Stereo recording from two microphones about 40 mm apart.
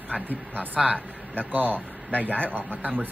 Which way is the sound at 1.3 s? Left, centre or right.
Right.